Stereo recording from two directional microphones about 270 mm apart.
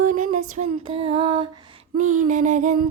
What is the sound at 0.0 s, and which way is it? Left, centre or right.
Female singing, right.